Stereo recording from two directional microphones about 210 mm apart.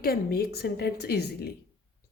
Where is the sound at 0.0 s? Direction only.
45° left (ahead or behind).